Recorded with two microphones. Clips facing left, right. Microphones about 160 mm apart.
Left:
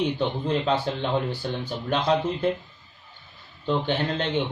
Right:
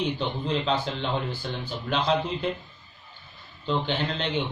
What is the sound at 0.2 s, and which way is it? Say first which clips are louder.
A man's voice: left 3 dB; 50° left (ahead or behind).